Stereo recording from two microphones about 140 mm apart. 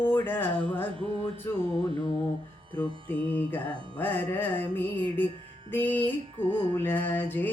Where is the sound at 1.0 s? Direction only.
40° right (ahead or behind).